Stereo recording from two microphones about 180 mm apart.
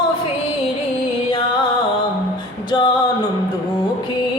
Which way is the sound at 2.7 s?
25° left (ahead or behind).